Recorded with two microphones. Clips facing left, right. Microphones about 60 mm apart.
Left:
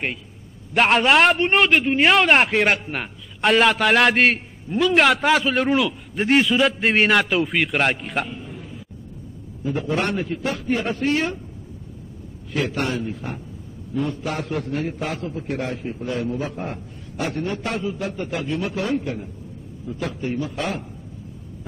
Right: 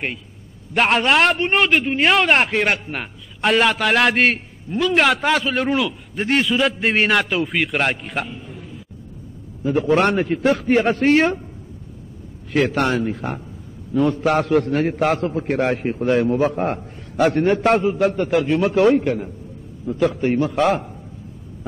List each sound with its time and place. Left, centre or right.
0.7 s a man's voice: centre
9.7 s a man's voice: right
12.7 s a man's voice: right